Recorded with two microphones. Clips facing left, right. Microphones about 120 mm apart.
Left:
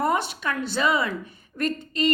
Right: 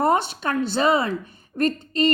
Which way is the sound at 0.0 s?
30° right (ahead or behind).